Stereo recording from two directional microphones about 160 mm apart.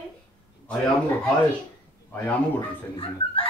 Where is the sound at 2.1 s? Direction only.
15° left (ahead or behind).